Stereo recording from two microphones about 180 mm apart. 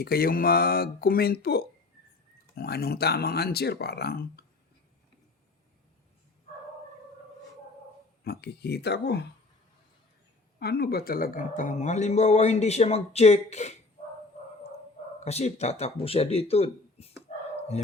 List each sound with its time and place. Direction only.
0.0 s speech: 60° left (ahead or behind)
8.2 s speech: 65° left (ahead or behind)
10.6 s speech: 60° left (ahead or behind); by 13.7 s 40° left (ahead or behind)
15.2 s speech: 35° left (ahead or behind)